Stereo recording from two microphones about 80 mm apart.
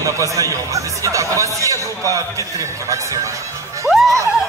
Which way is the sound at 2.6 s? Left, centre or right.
Right.